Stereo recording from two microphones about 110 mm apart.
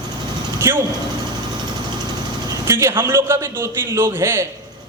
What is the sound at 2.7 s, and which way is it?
A man's voice, 25° right (ahead or behind).